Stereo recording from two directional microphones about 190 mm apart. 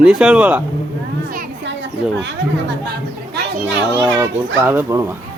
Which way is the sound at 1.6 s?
70° right (ahead or behind).